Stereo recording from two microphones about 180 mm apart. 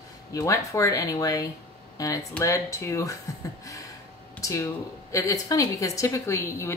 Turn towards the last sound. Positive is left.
turn(degrees=15)  # may be behind; listen again after turning